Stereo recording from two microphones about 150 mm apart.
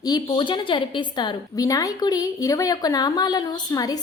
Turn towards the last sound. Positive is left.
turn(degrees=25)  # may be behind; listen again after turning